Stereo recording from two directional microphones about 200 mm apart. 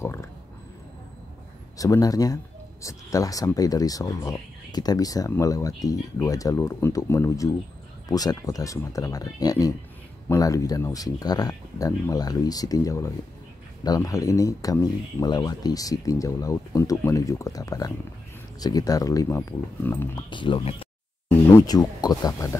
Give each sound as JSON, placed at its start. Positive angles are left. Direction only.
{"t": 0.0, "sound": "a sound", "side_deg": 15}
{"t": 1.8, "sound": "speech", "side_deg": 15}
{"t": 20.2, "sound": "speech", "side_deg": 25}